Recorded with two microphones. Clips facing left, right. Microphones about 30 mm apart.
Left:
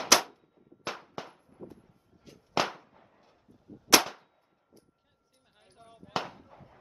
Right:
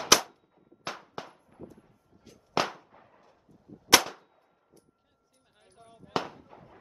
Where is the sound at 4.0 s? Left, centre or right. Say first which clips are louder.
Left 1 dB; centre.